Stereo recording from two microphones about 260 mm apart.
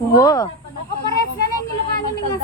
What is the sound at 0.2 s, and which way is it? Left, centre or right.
Speech, centre.